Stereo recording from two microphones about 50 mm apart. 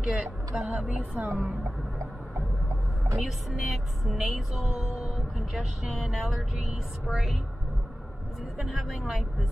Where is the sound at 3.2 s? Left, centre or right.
Centre.